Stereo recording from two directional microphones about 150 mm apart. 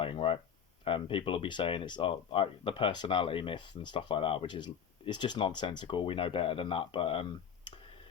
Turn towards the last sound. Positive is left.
turn(degrees=35)  # may be behind; listen again after turning